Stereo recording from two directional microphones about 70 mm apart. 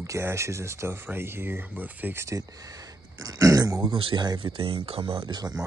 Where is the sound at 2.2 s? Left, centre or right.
Right.